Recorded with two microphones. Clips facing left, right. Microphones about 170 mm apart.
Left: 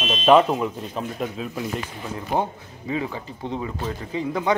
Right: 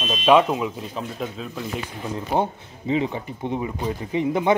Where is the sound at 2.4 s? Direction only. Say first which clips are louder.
Right 2 dB; 20° right (ahead or behind).